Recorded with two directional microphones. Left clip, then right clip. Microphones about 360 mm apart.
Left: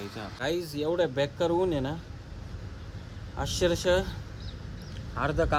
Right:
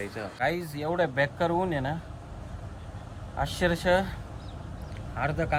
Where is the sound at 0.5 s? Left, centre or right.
Centre.